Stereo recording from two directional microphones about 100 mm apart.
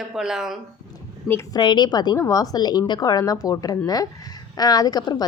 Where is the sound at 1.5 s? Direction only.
50° left (ahead or behind).